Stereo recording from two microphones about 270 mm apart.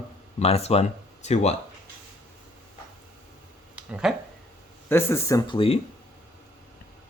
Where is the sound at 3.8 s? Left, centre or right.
Centre.